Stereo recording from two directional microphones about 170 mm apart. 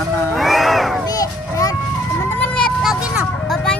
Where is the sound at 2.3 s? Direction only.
10° left (ahead or behind).